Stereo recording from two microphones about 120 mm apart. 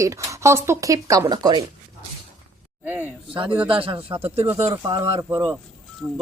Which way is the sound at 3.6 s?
50° right (ahead or behind).